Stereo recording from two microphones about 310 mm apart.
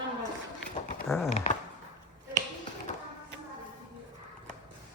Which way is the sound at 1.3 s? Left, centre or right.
Left.